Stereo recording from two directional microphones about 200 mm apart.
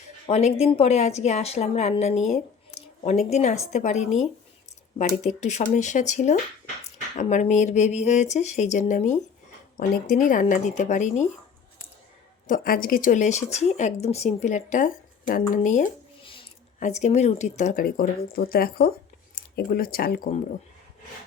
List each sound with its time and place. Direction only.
0.3 s speech: 30° left (ahead or behind)
12.5 s speech: 45° left (ahead or behind)